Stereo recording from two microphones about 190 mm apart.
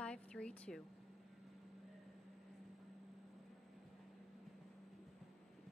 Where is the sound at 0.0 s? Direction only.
5° left (ahead or behind).